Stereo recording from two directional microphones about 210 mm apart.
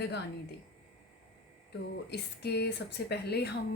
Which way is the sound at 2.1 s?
50° left (ahead or behind).